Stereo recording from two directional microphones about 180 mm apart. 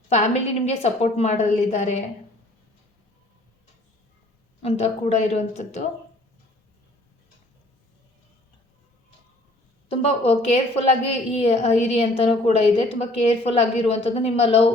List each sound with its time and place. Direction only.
0.1 s a woman's voice: 35° left (ahead or behind)
4.6 s a woman's voice: 35° left (ahead or behind)
9.9 s a woman's voice: 30° left (ahead or behind)